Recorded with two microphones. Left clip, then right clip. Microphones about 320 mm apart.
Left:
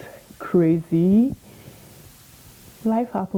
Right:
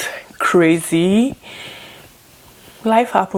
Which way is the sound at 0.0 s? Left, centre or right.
Centre.